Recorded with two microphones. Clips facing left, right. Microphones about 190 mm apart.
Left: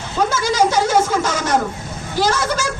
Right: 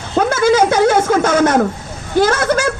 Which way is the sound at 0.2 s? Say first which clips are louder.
Right 5 dB; 60° right (ahead or behind).